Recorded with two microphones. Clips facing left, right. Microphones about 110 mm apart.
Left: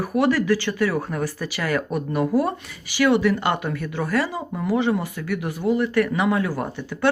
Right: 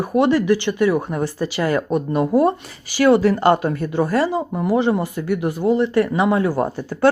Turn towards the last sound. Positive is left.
turn(degrees=-40)  # may be behind; listen again after turning